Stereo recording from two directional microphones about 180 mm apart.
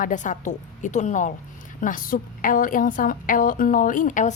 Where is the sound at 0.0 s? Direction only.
45° left (ahead or behind).